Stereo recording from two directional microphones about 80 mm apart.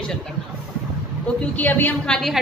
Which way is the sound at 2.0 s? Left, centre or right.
Centre.